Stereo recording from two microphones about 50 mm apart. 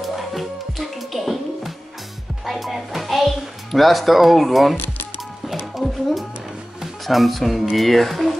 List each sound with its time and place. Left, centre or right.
0.0 s music: centre
2.4 s a child's voice: centre
4.7 s music: left
5.8 s music: centre
6.8 s speech: centre